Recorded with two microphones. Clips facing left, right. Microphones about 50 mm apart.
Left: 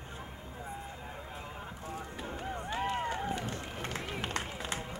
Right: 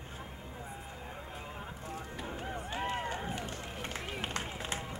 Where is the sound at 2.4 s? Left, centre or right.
Centre.